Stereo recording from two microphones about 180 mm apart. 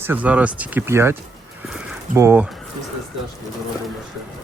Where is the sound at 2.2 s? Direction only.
15° right (ahead or behind).